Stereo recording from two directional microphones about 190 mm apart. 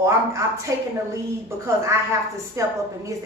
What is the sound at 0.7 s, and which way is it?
A woman's voice, 15° right (ahead or behind).